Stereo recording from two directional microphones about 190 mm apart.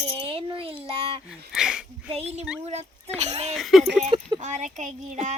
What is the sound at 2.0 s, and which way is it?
Speech, 30° right (ahead or behind).